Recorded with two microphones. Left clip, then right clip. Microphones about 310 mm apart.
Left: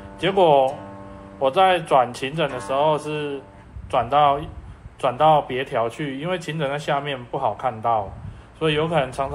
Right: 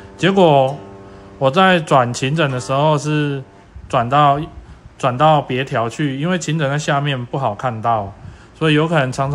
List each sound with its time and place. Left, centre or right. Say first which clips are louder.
0.2 s speech: right 4 dB; right